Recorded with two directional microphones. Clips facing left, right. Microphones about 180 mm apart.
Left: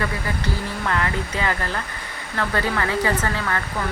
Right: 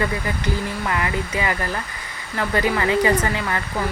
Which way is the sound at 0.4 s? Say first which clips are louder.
Right 2 dB; 10° right (ahead or behind).